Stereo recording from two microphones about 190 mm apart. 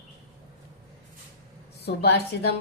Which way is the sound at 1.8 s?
60° left (ahead or behind).